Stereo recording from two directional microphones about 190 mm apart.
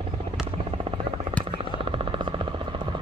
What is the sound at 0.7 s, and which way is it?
Helicopter, 30° right (ahead or behind).